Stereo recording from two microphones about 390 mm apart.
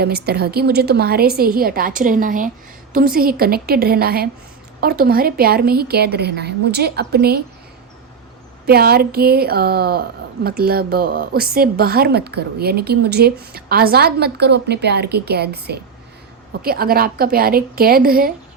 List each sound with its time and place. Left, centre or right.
0.3 s speech: right
8.6 s speech: right